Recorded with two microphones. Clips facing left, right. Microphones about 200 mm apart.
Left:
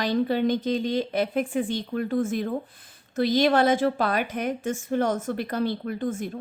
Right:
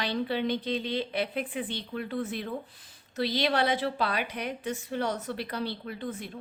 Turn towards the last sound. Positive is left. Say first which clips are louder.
# left 8 dB
turn(degrees=45)  # may be behind; listen again after turning